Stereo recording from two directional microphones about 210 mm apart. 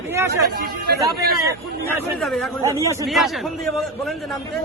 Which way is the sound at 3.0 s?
Centre (ahead or behind).